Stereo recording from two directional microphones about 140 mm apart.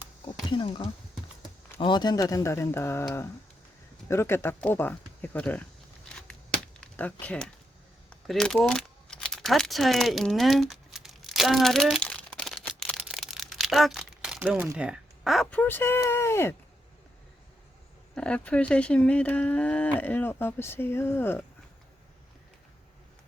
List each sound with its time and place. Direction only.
0.5 s speech: 35° left (ahead or behind); by 5.6 s 10° left (ahead or behind)
6.1 s a sound: 5° left (ahead or behind)
14.8 s speech: 5° right (ahead or behind); by 16.6 s 20° left (ahead or behind)
18.1 s speech: 5° left (ahead or behind)